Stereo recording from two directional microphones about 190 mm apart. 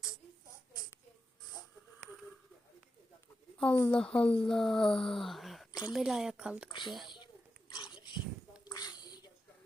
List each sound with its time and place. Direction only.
3.8 s speech: 10° left (ahead or behind)
6.7 s a woman's voice: 25° left (ahead or behind)
7.7 s dog: 25° left (ahead or behind)
8.6 s a sound: 20° left (ahead or behind)